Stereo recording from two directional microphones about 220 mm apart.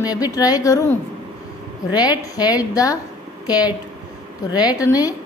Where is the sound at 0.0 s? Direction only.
15° left (ahead or behind).